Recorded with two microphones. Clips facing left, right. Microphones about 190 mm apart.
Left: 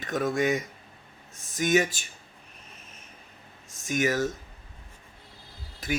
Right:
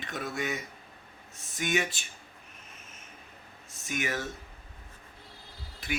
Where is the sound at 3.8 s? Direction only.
45° left (ahead or behind).